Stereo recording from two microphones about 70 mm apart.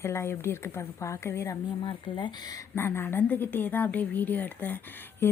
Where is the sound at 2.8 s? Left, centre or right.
Left.